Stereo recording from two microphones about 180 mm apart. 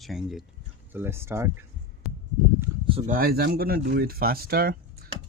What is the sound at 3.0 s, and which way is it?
Speech, 55° right (ahead or behind).